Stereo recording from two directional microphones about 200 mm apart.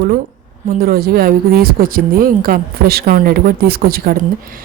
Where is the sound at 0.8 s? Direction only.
50° right (ahead or behind).